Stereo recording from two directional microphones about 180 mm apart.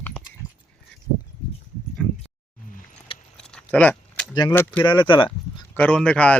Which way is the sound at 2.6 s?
50° left (ahead or behind).